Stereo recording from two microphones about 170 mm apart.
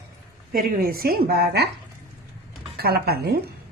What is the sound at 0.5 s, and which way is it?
Speech, 60° right (ahead or behind).